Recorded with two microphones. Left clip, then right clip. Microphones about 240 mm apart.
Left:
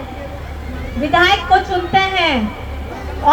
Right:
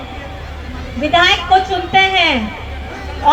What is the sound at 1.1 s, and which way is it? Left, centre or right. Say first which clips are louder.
A woman's voice: right 1 dB; left.